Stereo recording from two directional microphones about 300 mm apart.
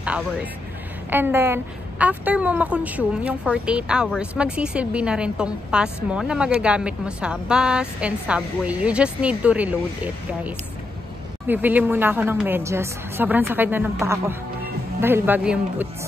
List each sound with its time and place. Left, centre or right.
0.0 s a woman's voice: centre